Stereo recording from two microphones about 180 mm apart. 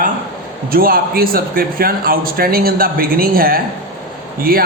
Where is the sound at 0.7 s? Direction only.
55° right (ahead or behind).